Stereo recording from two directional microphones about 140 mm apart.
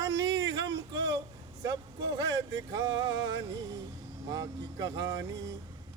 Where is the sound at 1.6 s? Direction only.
25° right (ahead or behind).